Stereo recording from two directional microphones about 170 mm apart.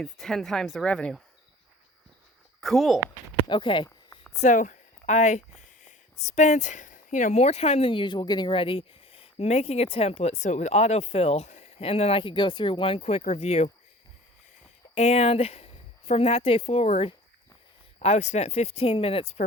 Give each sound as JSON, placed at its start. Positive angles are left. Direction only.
{"t": 0.0, "sound": "speech", "side_deg": 0}
{"t": 2.6, "sound": "speech", "side_deg": 0}
{"t": 3.4, "sound": "speech", "side_deg": 30}
{"t": 4.4, "sound": "speech", "side_deg": 45}
{"t": 14.9, "sound": "speech", "side_deg": 40}